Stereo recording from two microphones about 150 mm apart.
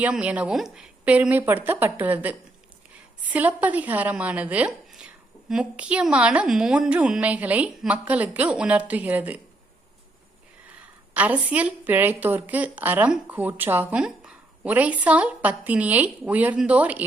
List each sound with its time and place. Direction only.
0.0 s a woman's voice: 10° right (ahead or behind)
11.1 s a woman's voice: 10° right (ahead or behind)